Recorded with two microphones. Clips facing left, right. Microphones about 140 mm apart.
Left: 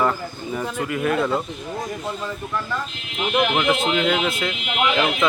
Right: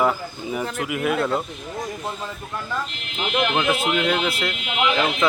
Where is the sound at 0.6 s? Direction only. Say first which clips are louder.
Left 1 dB; 5° left (ahead or behind).